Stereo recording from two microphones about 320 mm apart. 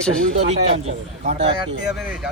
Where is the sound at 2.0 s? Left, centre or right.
Centre.